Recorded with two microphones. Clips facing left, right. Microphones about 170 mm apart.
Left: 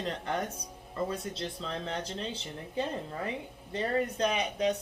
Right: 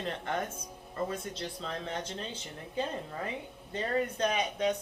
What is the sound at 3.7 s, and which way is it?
Speech, 35° left (ahead or behind).